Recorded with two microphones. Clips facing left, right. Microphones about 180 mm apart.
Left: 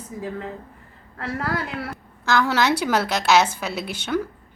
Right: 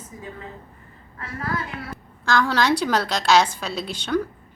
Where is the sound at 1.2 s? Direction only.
75° left (ahead or behind).